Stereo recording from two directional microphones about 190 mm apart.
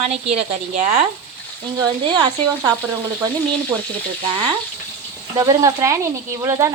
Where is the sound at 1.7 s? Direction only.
25° right (ahead or behind).